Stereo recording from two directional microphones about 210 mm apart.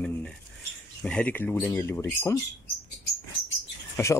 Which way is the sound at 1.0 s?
5° left (ahead or behind).